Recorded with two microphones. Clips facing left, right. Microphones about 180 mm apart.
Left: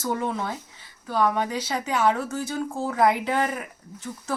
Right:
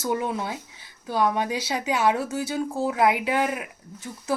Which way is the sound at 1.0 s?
15° right (ahead or behind).